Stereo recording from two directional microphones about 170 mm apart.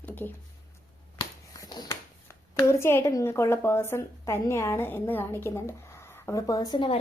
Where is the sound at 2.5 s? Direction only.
15° left (ahead or behind).